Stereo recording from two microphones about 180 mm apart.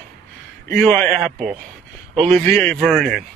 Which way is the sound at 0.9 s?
Centre (ahead or behind).